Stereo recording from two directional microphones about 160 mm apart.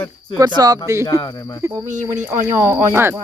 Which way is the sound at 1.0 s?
25° left (ahead or behind).